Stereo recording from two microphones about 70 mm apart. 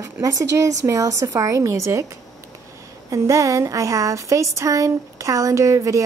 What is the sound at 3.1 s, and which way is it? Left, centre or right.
A woman's voice, right.